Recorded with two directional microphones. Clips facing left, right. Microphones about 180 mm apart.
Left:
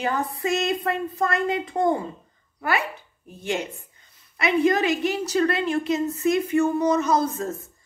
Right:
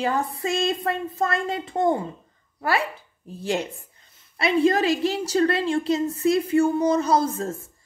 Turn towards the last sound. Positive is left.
turn(degrees=-30)  # may be behind; listen again after turning